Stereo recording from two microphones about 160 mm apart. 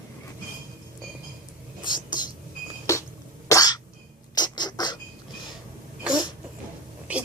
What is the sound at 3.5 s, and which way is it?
Cough, 20° left (ahead or behind).